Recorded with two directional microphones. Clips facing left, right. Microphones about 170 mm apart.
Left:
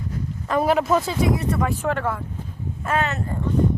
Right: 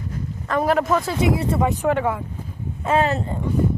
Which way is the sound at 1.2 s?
25° right (ahead or behind).